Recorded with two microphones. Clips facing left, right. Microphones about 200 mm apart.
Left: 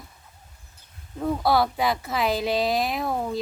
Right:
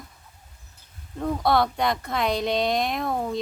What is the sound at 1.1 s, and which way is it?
Child singing, 5° left (ahead or behind).